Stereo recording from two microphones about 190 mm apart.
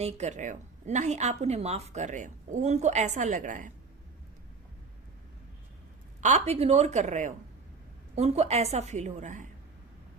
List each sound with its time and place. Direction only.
0.0 s a woman's voice: 40° right (ahead or behind)
6.2 s a woman's voice: 35° right (ahead or behind)